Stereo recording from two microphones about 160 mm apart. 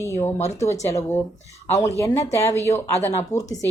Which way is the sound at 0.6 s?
45° left (ahead or behind).